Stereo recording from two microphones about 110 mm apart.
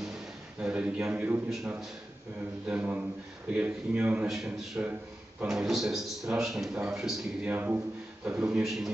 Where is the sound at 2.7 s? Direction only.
15° right (ahead or behind).